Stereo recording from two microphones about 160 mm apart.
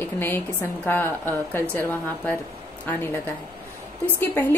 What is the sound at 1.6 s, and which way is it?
Speech, 15° right (ahead or behind).